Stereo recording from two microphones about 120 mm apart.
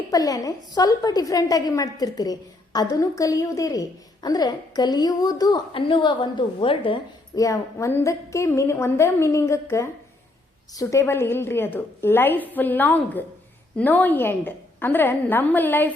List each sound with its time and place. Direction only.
0.1 s a woman's voice: 30° left (ahead or behind); by 7.0 s 50° left (ahead or behind)
7.3 s a woman's voice: 25° left (ahead or behind)
11.0 s a woman's voice: 20° left (ahead or behind)